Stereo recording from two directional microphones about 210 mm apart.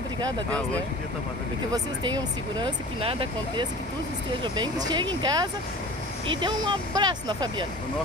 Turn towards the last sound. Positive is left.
turn(degrees=-20)  # may be behind; listen again after turning